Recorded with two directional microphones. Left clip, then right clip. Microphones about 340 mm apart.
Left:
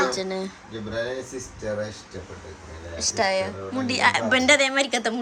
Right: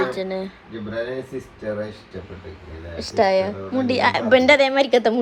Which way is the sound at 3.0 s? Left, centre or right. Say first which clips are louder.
Right 5 dB; centre.